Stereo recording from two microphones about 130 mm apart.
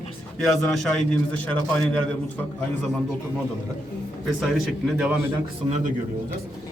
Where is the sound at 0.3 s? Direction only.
Centre (ahead or behind).